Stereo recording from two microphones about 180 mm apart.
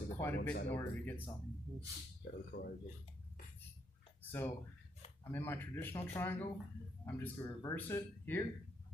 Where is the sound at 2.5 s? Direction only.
90° left.